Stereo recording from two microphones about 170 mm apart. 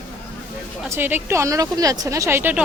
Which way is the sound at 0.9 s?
10° right (ahead or behind).